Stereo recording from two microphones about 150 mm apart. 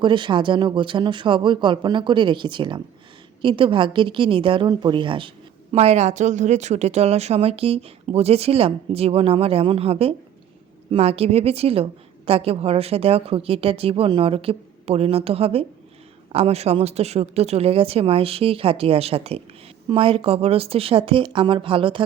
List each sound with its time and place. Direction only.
0.0 s a woman's voice: 30° right (ahead or behind)
5.7 s a woman's voice: 45° right (ahead or behind)